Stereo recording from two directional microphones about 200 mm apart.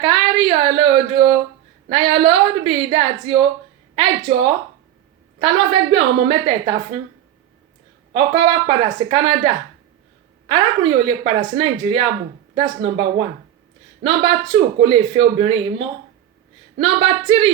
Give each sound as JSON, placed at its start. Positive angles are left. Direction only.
{"t": 0.0, "sound": "a woman's voice", "side_deg": -25}
{"t": 8.1, "sound": "a woman's voice", "side_deg": -25}
{"t": 16.7, "sound": "a woman's voice", "side_deg": -25}